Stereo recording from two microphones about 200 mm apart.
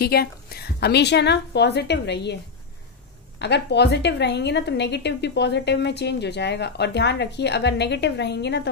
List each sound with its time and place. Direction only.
0.0 s a woman's voice: 50° left (ahead or behind)
3.3 s a woman's voice: 60° left (ahead or behind)